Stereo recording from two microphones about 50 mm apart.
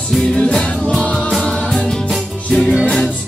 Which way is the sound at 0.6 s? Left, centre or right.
Centre.